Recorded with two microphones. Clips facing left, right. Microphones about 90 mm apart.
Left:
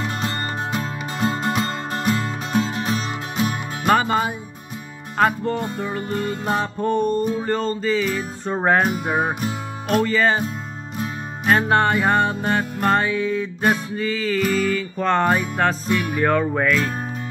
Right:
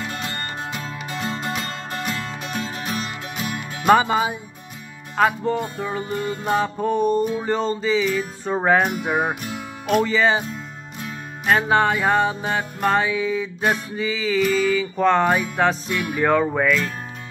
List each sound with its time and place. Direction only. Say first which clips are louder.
0.0 s music: left 4 dB; 35° left (ahead or behind)
0.7 s music: left 4 dB; 45° left (ahead or behind); by 3.6 s 30° left (ahead or behind)
3.8 s speech: right 2 dB; 10° right (ahead or behind)
5.4 s music: even; 15° right (ahead or behind)
7.9 s music: right 1 dB; centre (ahead or behind)
11.5 s music: left 1 dB; 5° right (ahead or behind)